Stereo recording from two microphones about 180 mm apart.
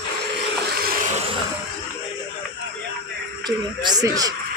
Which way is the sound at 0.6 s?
55° right (ahead or behind).